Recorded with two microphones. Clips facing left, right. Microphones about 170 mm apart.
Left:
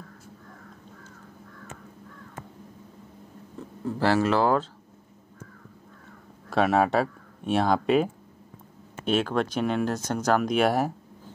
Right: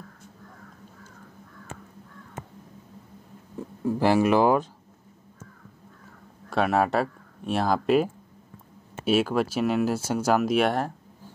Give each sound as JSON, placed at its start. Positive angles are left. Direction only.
{"t": 3.5, "sound": "speech", "side_deg": -15}
{"t": 6.5, "sound": "speech", "side_deg": 0}